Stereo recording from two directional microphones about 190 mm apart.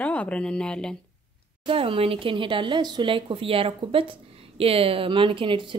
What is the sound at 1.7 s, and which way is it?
Speech, 30° right (ahead or behind).